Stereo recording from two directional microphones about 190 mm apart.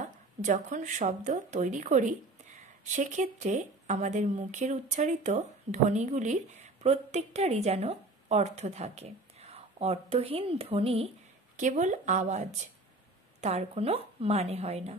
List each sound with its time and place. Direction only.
0.4 s speech: 40° right (ahead or behind)